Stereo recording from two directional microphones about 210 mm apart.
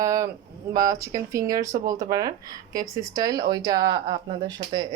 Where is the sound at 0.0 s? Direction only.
15° right (ahead or behind).